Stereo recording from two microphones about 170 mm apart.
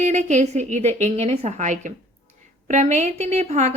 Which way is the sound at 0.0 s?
45° right (ahead or behind).